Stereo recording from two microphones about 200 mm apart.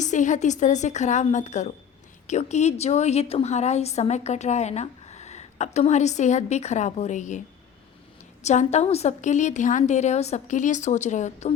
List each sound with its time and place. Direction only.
0.0 s speech: 40° left (ahead or behind)